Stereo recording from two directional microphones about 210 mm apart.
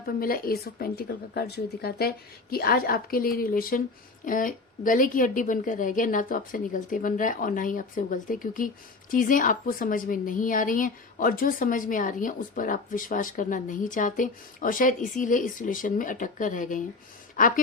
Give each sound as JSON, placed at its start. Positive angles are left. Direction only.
{"t": 0.2, "sound": "a woman's voice", "side_deg": 45}